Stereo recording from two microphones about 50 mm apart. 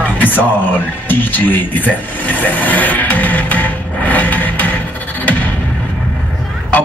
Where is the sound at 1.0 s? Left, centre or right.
Left.